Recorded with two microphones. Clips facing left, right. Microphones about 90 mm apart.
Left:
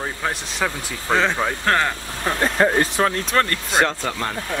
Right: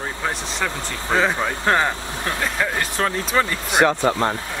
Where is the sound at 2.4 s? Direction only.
35° left (ahead or behind).